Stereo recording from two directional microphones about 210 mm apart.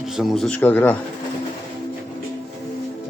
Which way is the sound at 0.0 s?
Centre (ahead or behind).